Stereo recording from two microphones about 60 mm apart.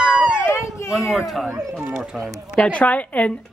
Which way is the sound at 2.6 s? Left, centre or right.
Left.